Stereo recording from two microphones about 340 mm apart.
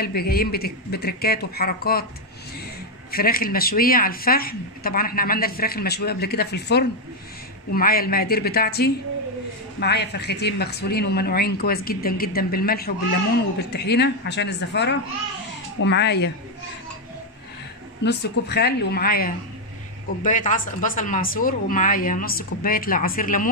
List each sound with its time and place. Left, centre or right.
0.0 s speech: left
3.1 s a woman's voice: left
18.0 s speech: left